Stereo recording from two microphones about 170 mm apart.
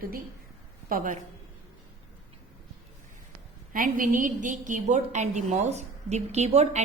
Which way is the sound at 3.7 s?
55° right (ahead or behind).